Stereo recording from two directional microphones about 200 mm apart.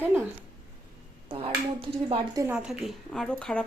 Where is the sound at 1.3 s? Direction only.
25° right (ahead or behind).